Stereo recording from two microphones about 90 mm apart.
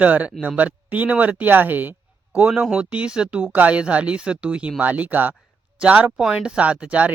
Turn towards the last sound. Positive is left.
turn(degrees=-15)  # may be behind; listen again after turning